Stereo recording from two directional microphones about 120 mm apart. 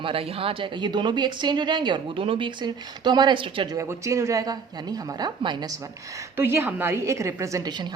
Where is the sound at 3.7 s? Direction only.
25° right (ahead or behind).